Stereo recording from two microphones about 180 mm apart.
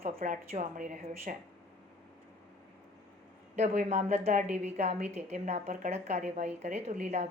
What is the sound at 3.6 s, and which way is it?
A woman's voice, 40° right (ahead or behind).